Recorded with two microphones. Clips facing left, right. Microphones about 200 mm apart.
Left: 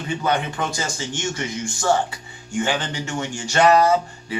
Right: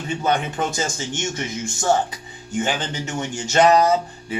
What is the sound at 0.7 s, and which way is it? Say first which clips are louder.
Speech: right 2 dB; 25° right (ahead or behind).